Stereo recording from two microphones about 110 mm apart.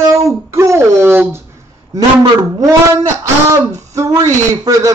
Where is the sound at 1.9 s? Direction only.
35° right (ahead or behind).